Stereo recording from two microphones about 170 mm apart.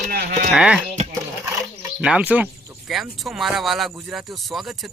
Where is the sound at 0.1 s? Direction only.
60° right (ahead or behind).